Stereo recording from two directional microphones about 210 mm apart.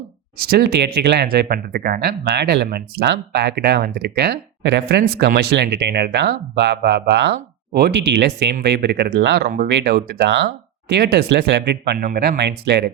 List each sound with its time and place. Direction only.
0.3 s speech: 45° right (ahead or behind)